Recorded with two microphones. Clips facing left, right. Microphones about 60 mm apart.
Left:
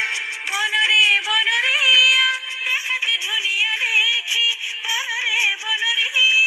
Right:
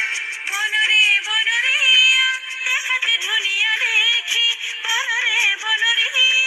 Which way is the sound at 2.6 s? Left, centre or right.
Right.